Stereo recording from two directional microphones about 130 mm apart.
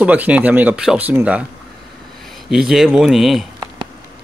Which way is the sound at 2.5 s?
5° right (ahead or behind).